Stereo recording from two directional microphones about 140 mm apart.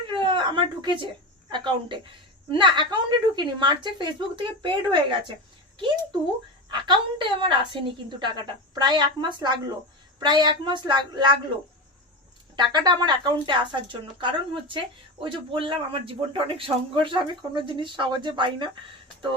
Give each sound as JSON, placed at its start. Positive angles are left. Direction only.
{"t": 0.1, "sound": "a sound", "side_deg": -35}
{"t": 1.5, "sound": "speech", "side_deg": -35}
{"t": 6.7, "sound": "speech", "side_deg": -35}
{"t": 12.5, "sound": "speech", "side_deg": -30}